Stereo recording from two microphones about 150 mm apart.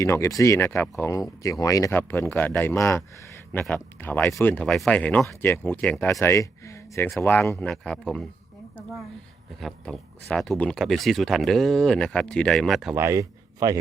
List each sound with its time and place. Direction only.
0.0 s speech: 20° left (ahead or behind); by 8.3 s 5° left (ahead or behind)
9.6 s speech: 5° left (ahead or behind)
12.9 s a man's voice: 20° right (ahead or behind)